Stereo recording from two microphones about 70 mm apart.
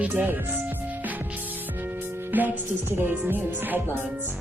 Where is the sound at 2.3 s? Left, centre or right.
Right.